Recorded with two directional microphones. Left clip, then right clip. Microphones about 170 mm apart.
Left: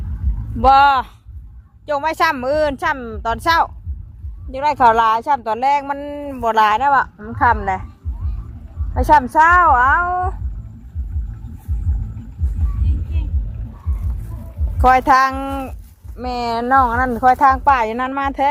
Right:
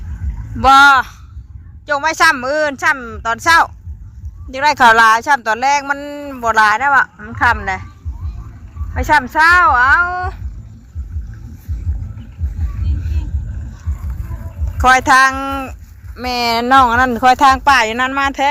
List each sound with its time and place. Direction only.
0.7 s speech: 10° left (ahead or behind)
4.5 s speech: centre (ahead or behind); by 6.8 s 25° left (ahead or behind)
6.8 s speech: centre (ahead or behind)
7.4 s speech: 10° left (ahead or behind)
9.0 s speech: 10° left (ahead or behind)
14.8 s speech: 10° left (ahead or behind)
16.1 s speech: 5° right (ahead or behind); by 17.6 s 30° right (ahead or behind)
17.7 s speech: 5° left (ahead or behind)